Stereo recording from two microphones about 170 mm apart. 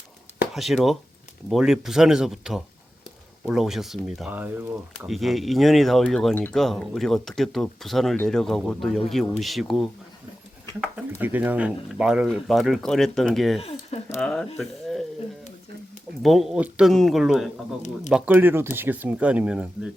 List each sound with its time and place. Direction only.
0.5 s speech: centre (ahead or behind)
5.0 s speech: centre (ahead or behind)
13.6 s a sound: 35° left (ahead or behind)
14.2 s speech: centre (ahead or behind)
16.2 s speech: centre (ahead or behind)